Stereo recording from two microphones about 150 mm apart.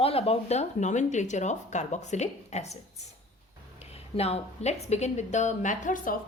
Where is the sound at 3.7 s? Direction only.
45° left (ahead or behind).